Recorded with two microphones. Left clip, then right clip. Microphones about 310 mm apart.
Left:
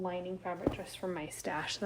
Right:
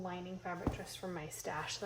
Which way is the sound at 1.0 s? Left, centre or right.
Left.